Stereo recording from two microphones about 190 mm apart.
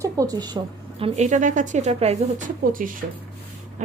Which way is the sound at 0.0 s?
20° right (ahead or behind).